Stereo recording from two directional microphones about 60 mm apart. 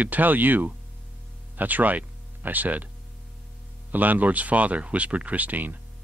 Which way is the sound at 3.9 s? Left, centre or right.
Right.